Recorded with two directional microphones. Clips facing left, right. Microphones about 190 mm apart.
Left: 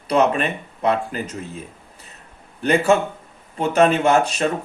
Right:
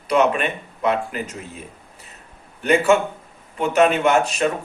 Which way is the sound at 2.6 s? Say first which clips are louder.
Even; 35° left (ahead or behind).